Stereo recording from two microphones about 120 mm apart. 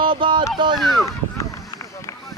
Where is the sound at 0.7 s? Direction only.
Centre (ahead or behind).